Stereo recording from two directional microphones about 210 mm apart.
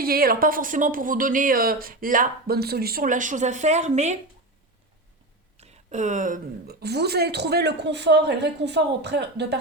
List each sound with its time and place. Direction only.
0.0 s speech: 45° right (ahead or behind)
5.5 s speech: 35° right (ahead or behind); by 9.6 s 55° right (ahead or behind)